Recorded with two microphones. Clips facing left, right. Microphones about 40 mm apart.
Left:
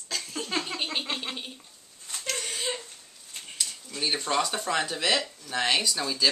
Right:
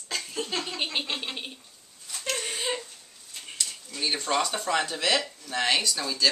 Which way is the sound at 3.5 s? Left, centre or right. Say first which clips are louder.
Even; centre.